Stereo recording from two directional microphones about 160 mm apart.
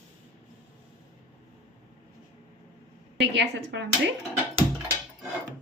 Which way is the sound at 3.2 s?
90° right.